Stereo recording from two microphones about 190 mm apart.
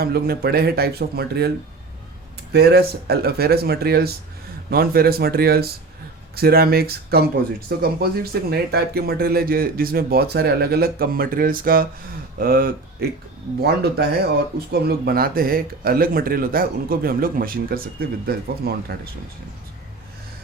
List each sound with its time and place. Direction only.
0.0 s speech: 55° right (ahead or behind)